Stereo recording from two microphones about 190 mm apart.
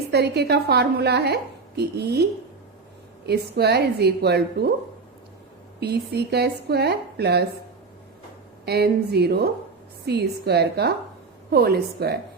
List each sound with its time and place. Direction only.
0.1 s a woman's voice: 60° right (ahead or behind)
3.2 s a woman's voice: 60° right (ahead or behind)
5.8 s a woman's voice: 60° right (ahead or behind)
8.6 s a woman's voice: 55° right (ahead or behind)